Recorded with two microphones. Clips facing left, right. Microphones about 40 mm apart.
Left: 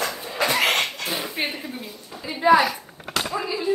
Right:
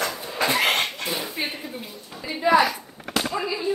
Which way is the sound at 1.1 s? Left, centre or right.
Left.